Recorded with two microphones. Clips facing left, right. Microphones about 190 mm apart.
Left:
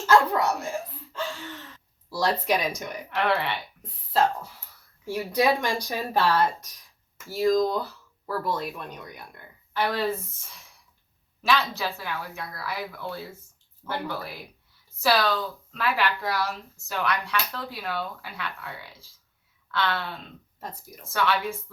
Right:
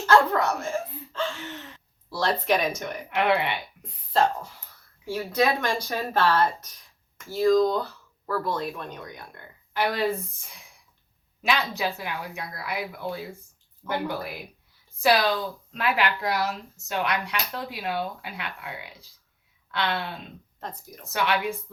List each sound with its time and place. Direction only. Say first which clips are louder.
0.3 s speech: even; 10° left (ahead or behind)
0.6 s whimper: right 2 dB; 15° left (ahead or behind)
1.4 s a sound: right 2 dB; 15° right (ahead or behind)
2.0 s speech: even; 10° left (ahead or behind)
3.2 s a woman's voice: right 2 dB; 15° right (ahead or behind)
4.1 s speech: right 1 dB; 5° left (ahead or behind)
5.1 s speech: left 1 dB; 15° left (ahead or behind)
9.7 s a woman's voice: right 1 dB; 10° right (ahead or behind)
20.6 s speech: right 1 dB; 5° left (ahead or behind)
21.0 s a woman's voice: even; 15° right (ahead or behind)